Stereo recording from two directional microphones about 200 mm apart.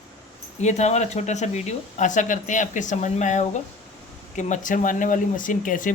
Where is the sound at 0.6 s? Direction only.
35° left (ahead or behind).